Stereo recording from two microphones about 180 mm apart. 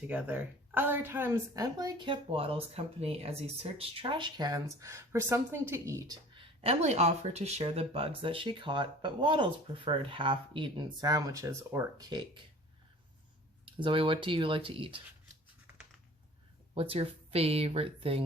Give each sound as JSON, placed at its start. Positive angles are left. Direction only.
{"t": 0.1, "sound": "a woman's voice", "side_deg": -10}
{"t": 6.6, "sound": "a woman's voice", "side_deg": -35}
{"t": 13.7, "sound": "a woman's voice", "side_deg": -30}
{"t": 16.7, "sound": "speech", "side_deg": -30}